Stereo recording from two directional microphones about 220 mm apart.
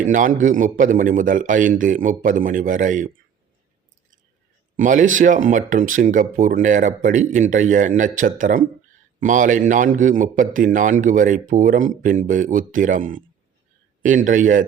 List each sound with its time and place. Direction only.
0.0 s a man's voice: 35° right (ahead or behind)
4.8 s a man's voice: 35° right (ahead or behind)